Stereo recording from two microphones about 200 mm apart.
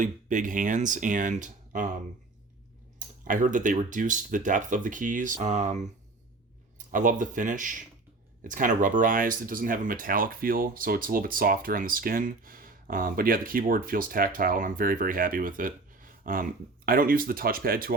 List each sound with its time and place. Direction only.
0.0 s speech: 40° right (ahead or behind)
3.2 s speech: 40° right (ahead or behind)